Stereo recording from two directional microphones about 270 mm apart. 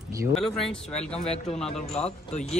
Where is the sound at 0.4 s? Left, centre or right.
Centre.